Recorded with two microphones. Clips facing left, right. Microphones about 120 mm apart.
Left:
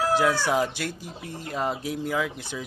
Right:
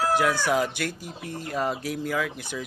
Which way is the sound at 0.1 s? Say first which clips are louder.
Even; 25° left (ahead or behind).